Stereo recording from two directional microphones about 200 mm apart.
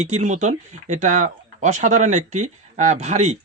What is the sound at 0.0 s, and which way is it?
Speech, 35° right (ahead or behind).